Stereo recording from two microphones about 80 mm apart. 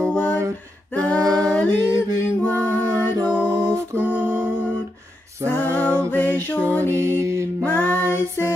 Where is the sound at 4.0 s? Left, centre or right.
Right.